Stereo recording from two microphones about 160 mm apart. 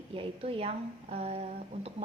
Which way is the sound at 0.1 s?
35° right (ahead or behind).